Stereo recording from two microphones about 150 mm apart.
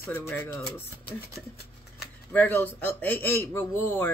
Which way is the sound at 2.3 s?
10° left (ahead or behind).